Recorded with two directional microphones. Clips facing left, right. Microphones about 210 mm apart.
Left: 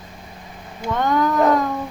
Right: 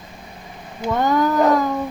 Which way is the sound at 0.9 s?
5° right (ahead or behind).